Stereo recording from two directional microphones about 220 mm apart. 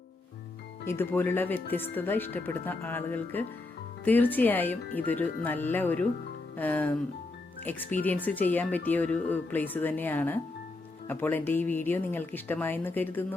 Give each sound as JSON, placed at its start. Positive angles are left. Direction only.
{"t": 0.9, "sound": "speech", "side_deg": 10}